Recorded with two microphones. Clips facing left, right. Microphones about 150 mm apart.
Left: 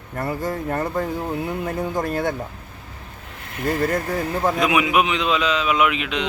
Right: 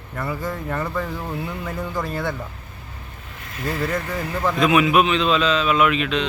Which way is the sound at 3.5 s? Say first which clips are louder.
Left 3 dB; 50° left (ahead or behind).